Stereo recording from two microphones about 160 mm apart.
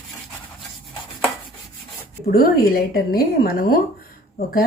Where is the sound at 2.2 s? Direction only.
70° left (ahead or behind).